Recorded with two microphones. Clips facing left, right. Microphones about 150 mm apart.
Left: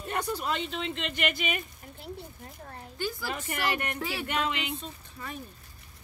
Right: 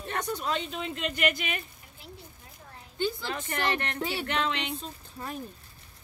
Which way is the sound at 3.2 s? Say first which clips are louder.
Right 1 dB; 10° left (ahead or behind).